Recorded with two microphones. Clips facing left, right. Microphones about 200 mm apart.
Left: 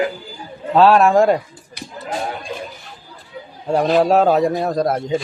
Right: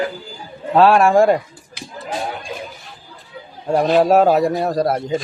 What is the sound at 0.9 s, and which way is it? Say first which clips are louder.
Speech: even; 15° right (ahead or behind).